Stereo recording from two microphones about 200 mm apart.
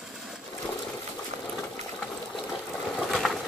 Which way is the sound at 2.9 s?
Centre (ahead or behind).